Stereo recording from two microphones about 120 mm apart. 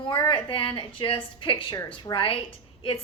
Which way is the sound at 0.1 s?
40° left (ahead or behind).